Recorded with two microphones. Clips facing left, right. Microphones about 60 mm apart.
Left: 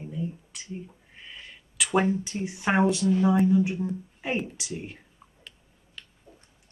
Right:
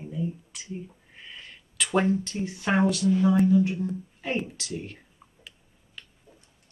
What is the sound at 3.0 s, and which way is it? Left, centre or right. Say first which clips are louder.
Speech: even; centre.